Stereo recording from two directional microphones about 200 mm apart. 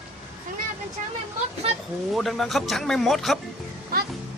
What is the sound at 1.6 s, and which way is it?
Speech, 30° right (ahead or behind).